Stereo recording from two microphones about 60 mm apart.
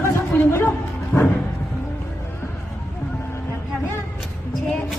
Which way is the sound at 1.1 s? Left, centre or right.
Left.